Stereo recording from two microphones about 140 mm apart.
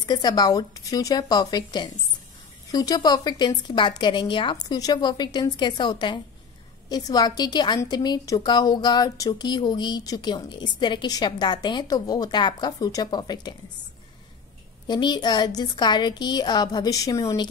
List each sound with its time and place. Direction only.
0.0 s a woman's voice: 30° left (ahead or behind)
14.9 s a woman's voice: 30° left (ahead or behind)